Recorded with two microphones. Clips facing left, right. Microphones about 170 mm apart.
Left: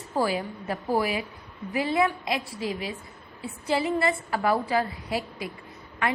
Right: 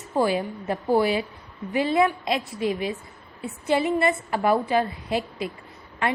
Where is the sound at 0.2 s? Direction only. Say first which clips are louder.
Right 4 dB; 25° right (ahead or behind).